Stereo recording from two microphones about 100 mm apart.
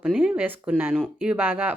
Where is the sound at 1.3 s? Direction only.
20° right (ahead or behind).